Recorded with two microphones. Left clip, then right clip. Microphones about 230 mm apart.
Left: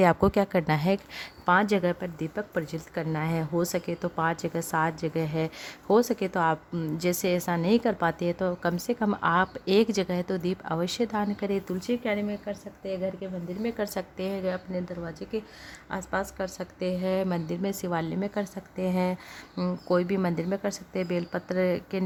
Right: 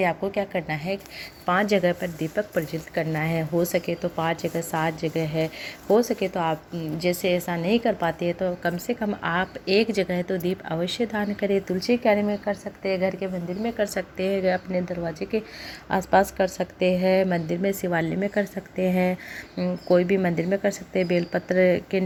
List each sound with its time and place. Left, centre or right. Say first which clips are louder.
0.0 s a woman's voice: left 2 dB; left
1.5 s a woman's voice: right 2 dB; centre
13.6 s speech: right 5 dB; centre
15.9 s a woman's voice: right 11 dB; centre